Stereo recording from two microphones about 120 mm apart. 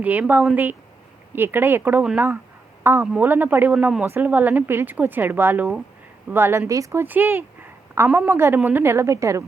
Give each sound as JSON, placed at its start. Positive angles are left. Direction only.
{"t": 0.0, "sound": "a woman's voice", "side_deg": -15}